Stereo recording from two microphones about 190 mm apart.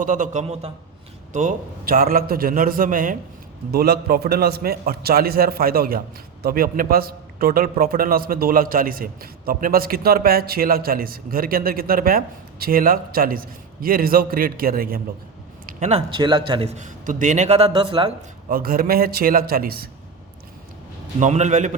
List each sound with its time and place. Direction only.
0.0 s a man's voice: 45° right (ahead or behind)
15.6 s a man's voice: 35° right (ahead or behind)
17.7 s speech: 25° right (ahead or behind)
18.4 s a man's voice: 50° right (ahead or behind)
21.2 s a man's voice: 40° right (ahead or behind)